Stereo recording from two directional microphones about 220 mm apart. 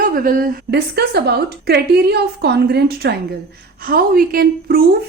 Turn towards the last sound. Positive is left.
turn(degrees=-40)  # may be behind; listen again after turning